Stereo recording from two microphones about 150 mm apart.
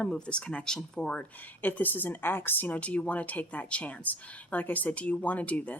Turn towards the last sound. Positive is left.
turn(degrees=10)  # may be behind; listen again after turning